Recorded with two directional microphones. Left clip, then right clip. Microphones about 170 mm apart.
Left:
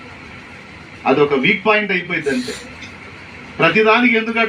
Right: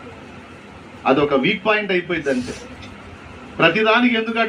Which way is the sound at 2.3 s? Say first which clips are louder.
Left 1 dB; 25° right (ahead or behind).